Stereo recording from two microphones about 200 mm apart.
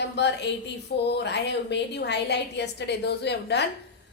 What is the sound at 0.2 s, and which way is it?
A woman's voice, 60° left (ahead or behind).